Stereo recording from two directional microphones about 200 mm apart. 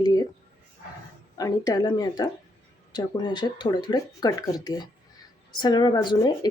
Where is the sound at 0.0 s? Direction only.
20° left (ahead or behind).